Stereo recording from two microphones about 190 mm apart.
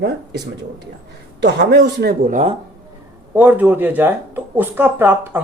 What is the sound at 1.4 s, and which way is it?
Speech, 65° right (ahead or behind).